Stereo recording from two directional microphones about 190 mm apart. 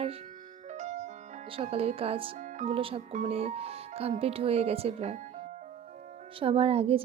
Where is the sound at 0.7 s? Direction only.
40° right (ahead or behind).